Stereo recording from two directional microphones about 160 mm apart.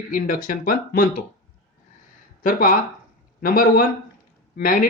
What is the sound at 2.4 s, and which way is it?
Speech, 60° left (ahead or behind).